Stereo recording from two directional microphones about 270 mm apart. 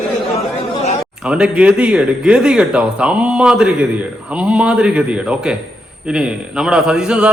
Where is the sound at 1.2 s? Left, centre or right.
Centre.